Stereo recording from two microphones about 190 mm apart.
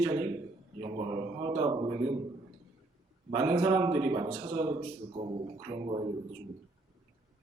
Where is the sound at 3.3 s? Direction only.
30° right (ahead or behind).